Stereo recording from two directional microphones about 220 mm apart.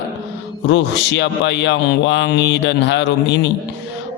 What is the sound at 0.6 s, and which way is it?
A man's voice, 55° left (ahead or behind).